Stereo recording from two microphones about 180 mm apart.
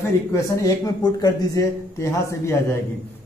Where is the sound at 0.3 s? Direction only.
15° left (ahead or behind).